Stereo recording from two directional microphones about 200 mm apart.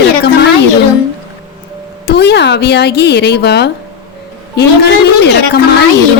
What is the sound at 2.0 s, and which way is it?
A woman's voice, 55° left (ahead or behind).